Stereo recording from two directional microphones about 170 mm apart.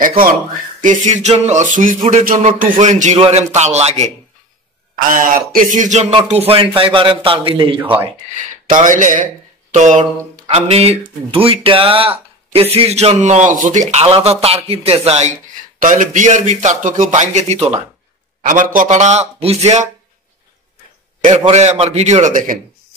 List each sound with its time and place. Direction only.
0.2 s speech: 55° right (ahead or behind)
5.1 s speech: 55° right (ahead or behind); by 7.8 s 30° right (ahead or behind)
8.6 s speech: 50° right (ahead or behind)
15.8 s speech: 50° right (ahead or behind)
18.4 s speech: 50° right (ahead or behind)
21.5 s speech: 40° right (ahead or behind)